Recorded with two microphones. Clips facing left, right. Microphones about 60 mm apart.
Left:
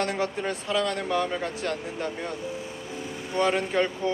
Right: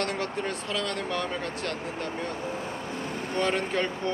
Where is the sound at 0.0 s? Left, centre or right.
Centre.